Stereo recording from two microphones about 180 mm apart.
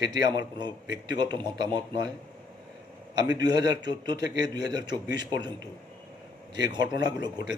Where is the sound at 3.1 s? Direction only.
25° right (ahead or behind).